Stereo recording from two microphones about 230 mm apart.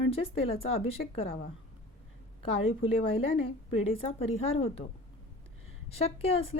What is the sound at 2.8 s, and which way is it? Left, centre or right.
A woman's voice, left.